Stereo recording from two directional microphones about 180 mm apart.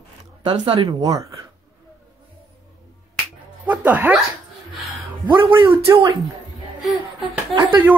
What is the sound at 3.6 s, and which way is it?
Speech, 10° right (ahead or behind).